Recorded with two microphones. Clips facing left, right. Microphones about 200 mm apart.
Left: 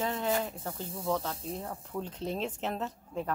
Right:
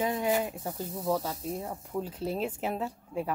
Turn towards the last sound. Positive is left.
turn(degrees=-10)  # may be behind; listen again after turning